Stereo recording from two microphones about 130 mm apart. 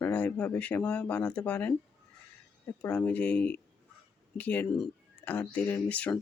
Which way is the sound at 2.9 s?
10° left (ahead or behind).